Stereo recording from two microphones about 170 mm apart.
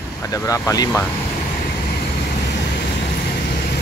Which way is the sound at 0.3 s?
20° left (ahead or behind).